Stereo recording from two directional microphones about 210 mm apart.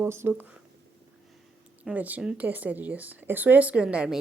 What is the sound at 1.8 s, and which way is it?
Speech, 5° right (ahead or behind).